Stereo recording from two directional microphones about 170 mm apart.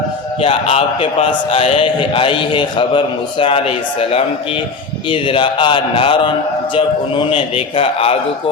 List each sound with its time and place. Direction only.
0.4 s a man's voice: 35° left (ahead or behind)